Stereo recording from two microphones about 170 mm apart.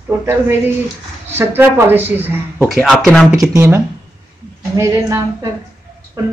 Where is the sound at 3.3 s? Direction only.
15° right (ahead or behind).